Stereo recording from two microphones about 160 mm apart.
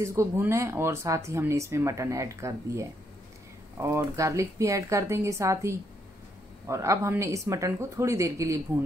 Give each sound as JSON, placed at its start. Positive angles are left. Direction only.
{"t": 0.0, "sound": "a woman's voice", "side_deg": -20}